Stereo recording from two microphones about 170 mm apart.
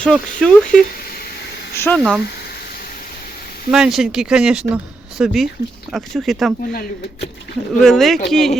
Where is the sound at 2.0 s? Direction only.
5° right (ahead or behind).